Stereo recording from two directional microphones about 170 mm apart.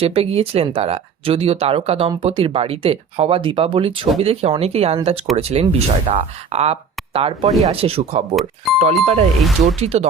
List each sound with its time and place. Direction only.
0.0 s speech: 35° right (ahead or behind)
8.7 s speech: centre (ahead or behind)
9.7 s speech: 40° right (ahead or behind)